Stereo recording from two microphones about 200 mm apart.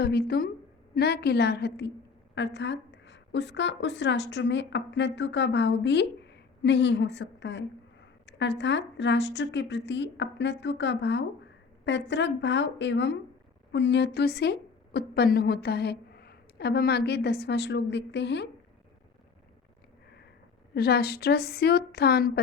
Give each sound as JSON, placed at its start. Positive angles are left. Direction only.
{"t": 0.0, "sound": "a woman's voice", "side_deg": 55}
{"t": 20.7, "sound": "a woman's voice", "side_deg": 55}